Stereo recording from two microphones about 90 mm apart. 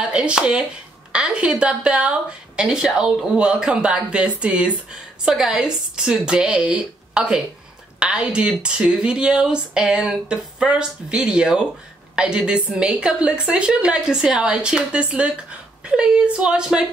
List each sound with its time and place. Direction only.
0.0 s a woman's voice: 10° right (ahead or behind)